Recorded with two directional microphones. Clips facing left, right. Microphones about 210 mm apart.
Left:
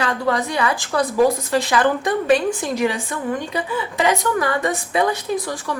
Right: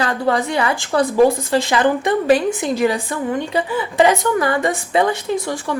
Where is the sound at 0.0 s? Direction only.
30° right (ahead or behind).